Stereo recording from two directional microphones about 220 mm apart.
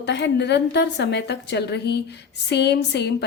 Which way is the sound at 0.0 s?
50° left (ahead or behind).